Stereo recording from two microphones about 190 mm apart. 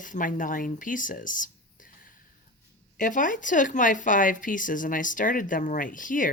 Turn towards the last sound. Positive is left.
turn(degrees=45)  # may be behind; listen again after turning